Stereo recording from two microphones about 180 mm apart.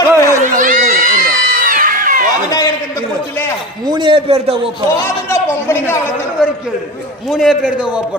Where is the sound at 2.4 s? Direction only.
20° left (ahead or behind).